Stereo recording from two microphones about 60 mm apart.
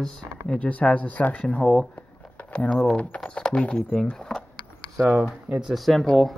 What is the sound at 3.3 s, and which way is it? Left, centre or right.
Speech, centre.